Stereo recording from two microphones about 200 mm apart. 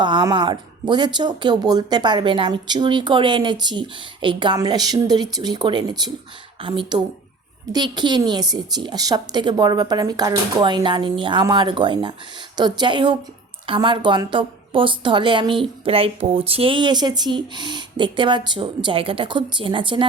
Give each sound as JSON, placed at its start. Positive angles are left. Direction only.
{"t": 0.0, "sound": "speech", "side_deg": -20}